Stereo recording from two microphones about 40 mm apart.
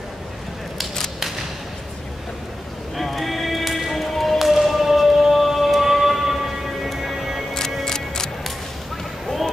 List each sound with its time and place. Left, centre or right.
3.0 s music: centre
7.8 s music: centre